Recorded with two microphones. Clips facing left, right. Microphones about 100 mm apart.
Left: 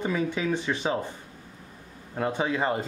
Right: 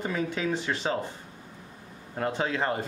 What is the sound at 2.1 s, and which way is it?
Speech, 10° left (ahead or behind).